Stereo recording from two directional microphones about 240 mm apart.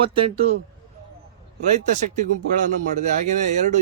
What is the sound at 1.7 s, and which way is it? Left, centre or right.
Speech, right.